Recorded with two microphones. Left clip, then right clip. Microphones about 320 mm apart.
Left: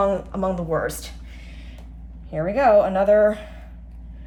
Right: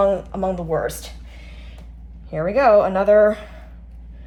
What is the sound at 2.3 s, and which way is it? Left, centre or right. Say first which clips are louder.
A woman's voice: right 2 dB; centre.